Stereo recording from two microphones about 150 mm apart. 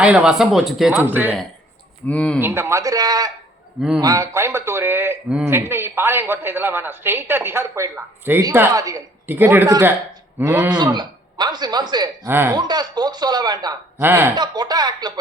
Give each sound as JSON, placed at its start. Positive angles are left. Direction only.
{"t": 0.0, "sound": "speech", "side_deg": -5}
{"t": 1.0, "sound": "a man's voice", "side_deg": -10}
{"t": 2.0, "sound": "speech", "side_deg": 10}
{"t": 2.4, "sound": "a man's voice", "side_deg": -15}
{"t": 10.9, "sound": "speech", "side_deg": -30}
{"t": 12.3, "sound": "a man's voice", "side_deg": -15}
{"t": 12.5, "sound": "speech", "side_deg": -30}
{"t": 14.0, "sound": "a man's voice", "side_deg": -15}
{"t": 14.3, "sound": "speech", "side_deg": -30}